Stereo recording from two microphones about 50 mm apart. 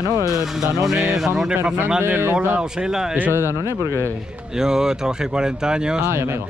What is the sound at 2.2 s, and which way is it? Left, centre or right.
Speech, right.